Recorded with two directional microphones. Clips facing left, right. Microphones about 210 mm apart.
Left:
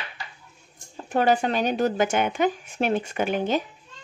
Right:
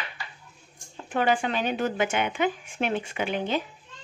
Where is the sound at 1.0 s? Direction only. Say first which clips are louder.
Left 3 dB; 40° left (ahead or behind).